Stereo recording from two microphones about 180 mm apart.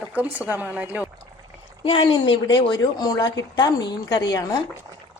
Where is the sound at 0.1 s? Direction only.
10° right (ahead or behind).